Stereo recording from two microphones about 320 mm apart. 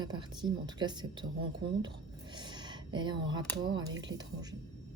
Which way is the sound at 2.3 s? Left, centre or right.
Centre.